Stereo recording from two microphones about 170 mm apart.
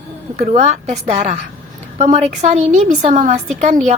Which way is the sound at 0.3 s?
45° right (ahead or behind).